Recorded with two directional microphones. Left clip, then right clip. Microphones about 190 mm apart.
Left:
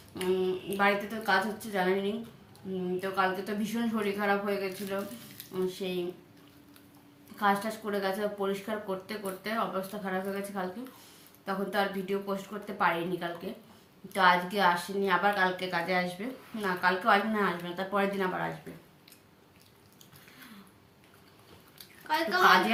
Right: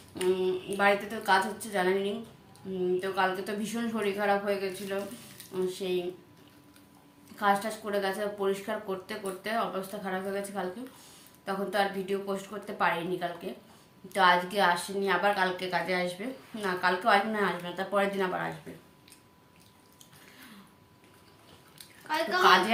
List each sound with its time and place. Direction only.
0.1 s a woman's voice: 10° right (ahead or behind)
7.3 s speech: 10° right (ahead or behind)
22.0 s a woman's voice: 15° left (ahead or behind)